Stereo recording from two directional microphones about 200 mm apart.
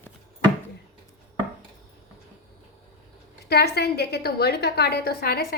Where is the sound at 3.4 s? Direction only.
55° left (ahead or behind).